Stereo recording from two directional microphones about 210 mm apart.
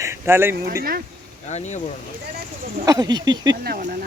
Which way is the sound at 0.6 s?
45° right (ahead or behind).